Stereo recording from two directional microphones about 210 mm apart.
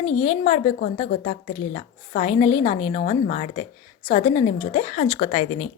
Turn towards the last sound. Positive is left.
turn(degrees=35)  # may be behind; listen again after turning